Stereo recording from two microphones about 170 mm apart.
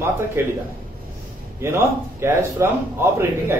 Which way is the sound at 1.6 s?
15° right (ahead or behind).